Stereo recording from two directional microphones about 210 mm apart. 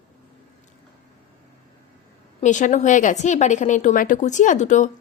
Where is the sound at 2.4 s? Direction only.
35° left (ahead or behind).